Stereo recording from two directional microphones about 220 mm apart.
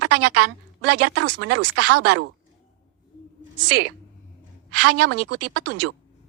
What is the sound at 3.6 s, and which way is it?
Speech, 90° right.